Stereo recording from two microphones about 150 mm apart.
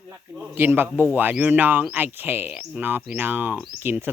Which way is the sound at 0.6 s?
15° right (ahead or behind).